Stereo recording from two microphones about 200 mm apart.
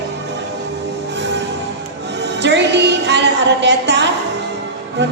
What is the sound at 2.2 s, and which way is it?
Music, 60° right (ahead or behind).